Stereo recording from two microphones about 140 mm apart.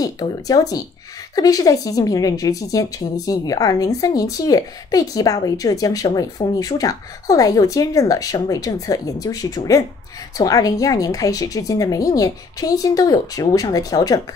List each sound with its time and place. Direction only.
0.0 s a woman's voice: 25° left (ahead or behind)